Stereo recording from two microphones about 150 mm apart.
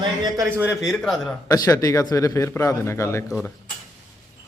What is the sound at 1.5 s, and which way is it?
Speech, 25° left (ahead or behind).